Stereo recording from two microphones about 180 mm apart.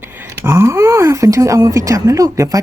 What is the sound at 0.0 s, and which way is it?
Speech, 10° right (ahead or behind).